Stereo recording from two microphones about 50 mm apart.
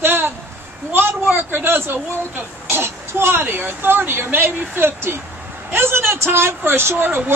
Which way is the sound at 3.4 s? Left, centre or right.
Right.